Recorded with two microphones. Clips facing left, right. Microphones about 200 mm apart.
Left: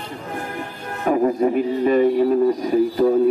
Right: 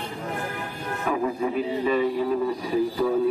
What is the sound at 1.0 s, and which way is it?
A man's voice, 40° left (ahead or behind).